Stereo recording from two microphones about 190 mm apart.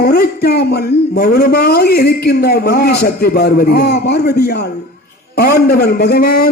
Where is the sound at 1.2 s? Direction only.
55° left (ahead or behind).